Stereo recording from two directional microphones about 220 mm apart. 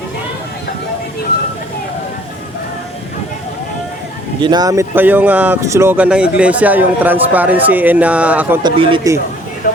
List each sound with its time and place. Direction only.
4.4 s speech: 20° right (ahead or behind)
8.6 s speech: 20° right (ahead or behind)